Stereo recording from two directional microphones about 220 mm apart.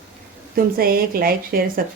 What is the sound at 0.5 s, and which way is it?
A woman's voice, 40° right (ahead or behind).